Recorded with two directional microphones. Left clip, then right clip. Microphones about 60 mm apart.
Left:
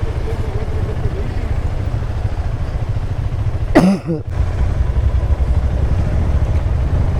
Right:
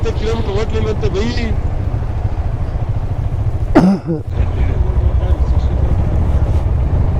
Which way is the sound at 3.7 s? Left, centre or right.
Left.